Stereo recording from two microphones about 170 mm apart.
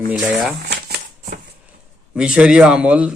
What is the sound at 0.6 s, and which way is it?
Shuffling cards, 70° right (ahead or behind).